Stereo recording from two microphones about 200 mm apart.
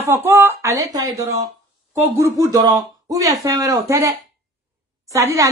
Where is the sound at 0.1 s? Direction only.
10° right (ahead or behind).